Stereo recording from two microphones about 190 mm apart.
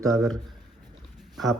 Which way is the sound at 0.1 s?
Centre (ahead or behind).